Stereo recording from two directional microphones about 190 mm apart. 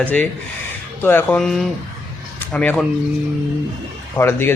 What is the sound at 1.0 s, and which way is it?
Speech, 10° left (ahead or behind).